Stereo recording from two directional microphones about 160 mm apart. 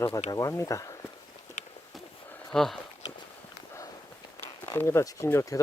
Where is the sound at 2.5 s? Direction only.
Centre (ahead or behind).